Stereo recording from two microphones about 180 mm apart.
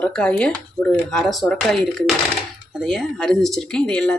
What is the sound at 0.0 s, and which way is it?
Speech, 5° left (ahead or behind).